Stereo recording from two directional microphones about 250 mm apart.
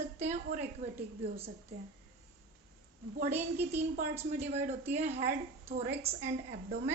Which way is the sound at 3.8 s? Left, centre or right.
Right.